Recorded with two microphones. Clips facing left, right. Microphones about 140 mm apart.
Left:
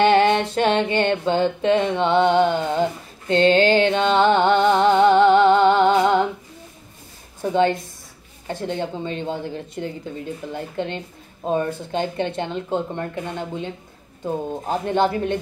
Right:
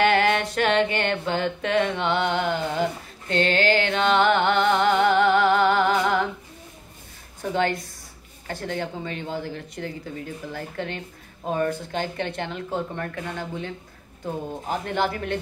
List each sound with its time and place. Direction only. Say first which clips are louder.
0.0 s music: left 4 dB; 25° left (ahead or behind)
8.5 s speech: left 4 dB; 20° left (ahead or behind)